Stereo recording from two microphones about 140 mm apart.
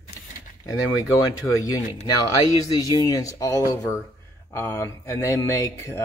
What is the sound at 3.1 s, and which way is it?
Speech, 25° left (ahead or behind).